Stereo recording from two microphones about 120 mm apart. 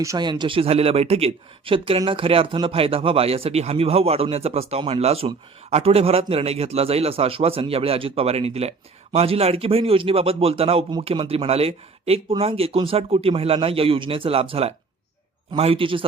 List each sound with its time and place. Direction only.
0.2 s a man's voice: 40° right (ahead or behind)